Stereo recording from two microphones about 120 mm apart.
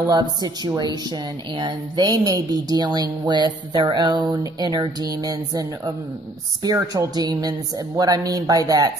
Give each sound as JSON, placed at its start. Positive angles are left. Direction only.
{"t": 0.0, "sound": "a woman's voice", "side_deg": -35}